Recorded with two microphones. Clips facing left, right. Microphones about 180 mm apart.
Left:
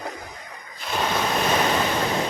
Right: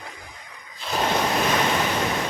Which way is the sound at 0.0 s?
45° left (ahead or behind).